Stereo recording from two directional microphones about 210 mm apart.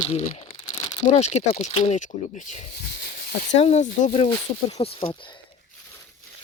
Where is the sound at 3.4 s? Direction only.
35° left (ahead or behind).